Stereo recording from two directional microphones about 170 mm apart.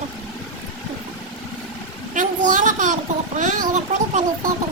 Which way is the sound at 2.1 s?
50° right (ahead or behind).